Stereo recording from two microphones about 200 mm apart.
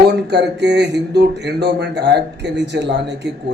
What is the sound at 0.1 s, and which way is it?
Speech, 55° right (ahead or behind).